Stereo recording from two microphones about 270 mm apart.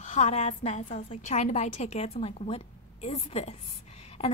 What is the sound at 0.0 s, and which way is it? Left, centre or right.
A woman's voice, left.